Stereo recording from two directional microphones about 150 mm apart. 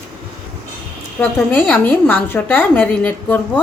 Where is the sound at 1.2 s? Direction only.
10° left (ahead or behind).